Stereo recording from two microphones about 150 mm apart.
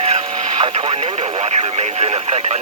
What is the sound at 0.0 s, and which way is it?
Speech, 45° right (ahead or behind).